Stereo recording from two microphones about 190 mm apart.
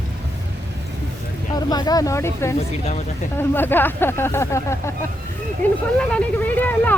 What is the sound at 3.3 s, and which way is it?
Speech, 10° left (ahead or behind).